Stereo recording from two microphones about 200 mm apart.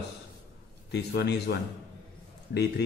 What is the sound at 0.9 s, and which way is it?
Speech, 55° left (ahead or behind).